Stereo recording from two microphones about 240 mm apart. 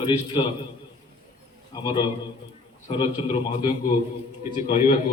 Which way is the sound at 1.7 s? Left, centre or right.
Centre.